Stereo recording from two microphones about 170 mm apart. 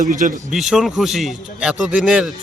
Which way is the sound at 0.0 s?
50° right (ahead or behind).